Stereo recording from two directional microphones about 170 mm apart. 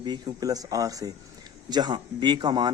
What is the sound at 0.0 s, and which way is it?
A man's voice, 25° right (ahead or behind).